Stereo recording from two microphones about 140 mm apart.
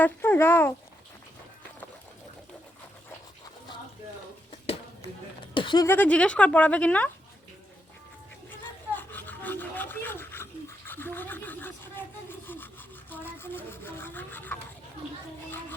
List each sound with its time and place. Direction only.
0.0 s speech: 15° left (ahead or behind)
5.5 s speech: 35° left (ahead or behind)
5.8 s speech: 15° left (ahead or behind)
8.4 s pant: 15° left (ahead or behind)
13.1 s speech: 15° left (ahead or behind)